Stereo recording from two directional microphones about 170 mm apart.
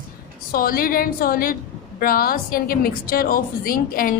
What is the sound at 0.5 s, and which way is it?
A woman's voice, 60° left (ahead or behind).